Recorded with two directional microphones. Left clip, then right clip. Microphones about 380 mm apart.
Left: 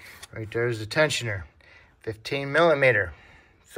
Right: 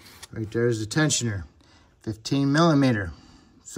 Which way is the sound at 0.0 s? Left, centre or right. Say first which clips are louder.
Right 2 dB; centre.